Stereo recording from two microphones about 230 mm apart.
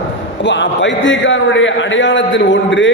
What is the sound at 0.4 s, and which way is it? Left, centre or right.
A man's voice, left.